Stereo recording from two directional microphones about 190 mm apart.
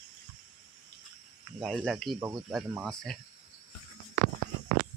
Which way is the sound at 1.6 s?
Centre (ahead or behind).